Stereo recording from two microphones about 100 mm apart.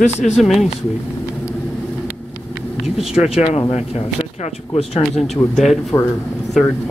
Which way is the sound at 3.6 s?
85° left.